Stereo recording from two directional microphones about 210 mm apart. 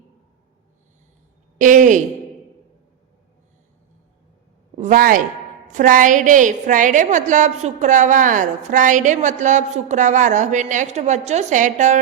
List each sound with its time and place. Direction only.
1.5 s a woman's voice: 40° right (ahead or behind)
4.8 s a woman's voice: 40° right (ahead or behind)